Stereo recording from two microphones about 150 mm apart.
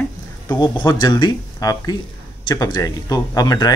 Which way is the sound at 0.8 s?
30° left (ahead or behind).